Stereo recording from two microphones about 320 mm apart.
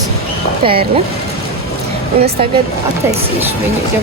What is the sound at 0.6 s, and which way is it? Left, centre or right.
Speech, centre.